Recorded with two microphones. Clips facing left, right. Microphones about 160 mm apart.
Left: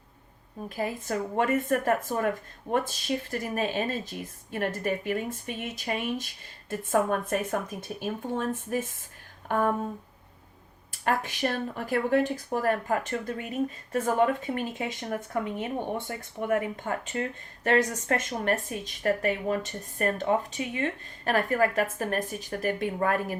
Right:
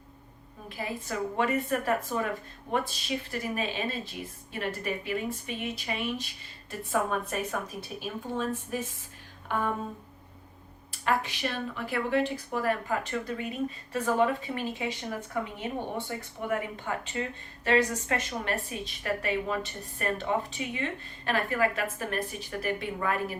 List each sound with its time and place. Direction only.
0.8 s speech: 45° left (ahead or behind)
10.9 s speech: 45° left (ahead or behind)